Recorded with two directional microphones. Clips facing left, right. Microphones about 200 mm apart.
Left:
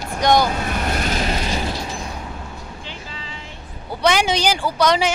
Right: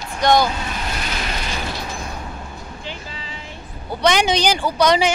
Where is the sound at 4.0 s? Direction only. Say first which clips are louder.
Right 1 dB; 5° left (ahead or behind).